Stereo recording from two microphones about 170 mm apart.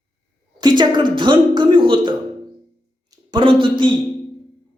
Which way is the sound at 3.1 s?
25° right (ahead or behind).